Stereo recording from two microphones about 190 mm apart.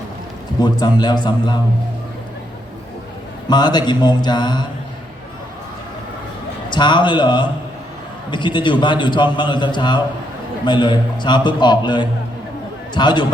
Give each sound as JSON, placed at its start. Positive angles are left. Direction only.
{"t": 0.6, "sound": "a man's voice", "side_deg": 20}
{"t": 3.5, "sound": "a man's voice", "side_deg": 20}
{"t": 6.7, "sound": "a man's voice", "side_deg": 25}